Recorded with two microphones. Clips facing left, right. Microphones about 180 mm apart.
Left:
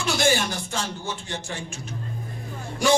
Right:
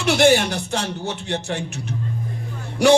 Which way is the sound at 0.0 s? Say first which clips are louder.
Right 7 dB; 65° right (ahead or behind).